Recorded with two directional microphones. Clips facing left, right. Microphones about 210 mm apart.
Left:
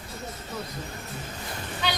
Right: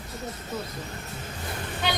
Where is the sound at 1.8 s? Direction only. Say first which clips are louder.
Right 1 dB; 50° right (ahead or behind).